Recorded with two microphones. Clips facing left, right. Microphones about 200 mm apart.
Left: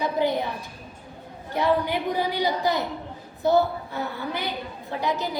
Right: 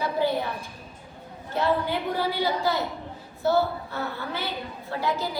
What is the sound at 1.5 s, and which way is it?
A woman's voice, 15° left (ahead or behind).